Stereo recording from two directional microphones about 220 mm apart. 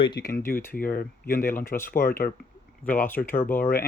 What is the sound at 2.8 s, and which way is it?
Speech, 10° left (ahead or behind).